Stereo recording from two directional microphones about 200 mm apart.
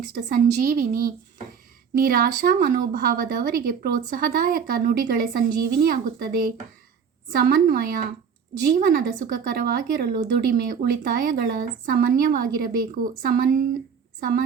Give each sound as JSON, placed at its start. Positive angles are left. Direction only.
{"t": 0.2, "sound": "speech", "side_deg": -45}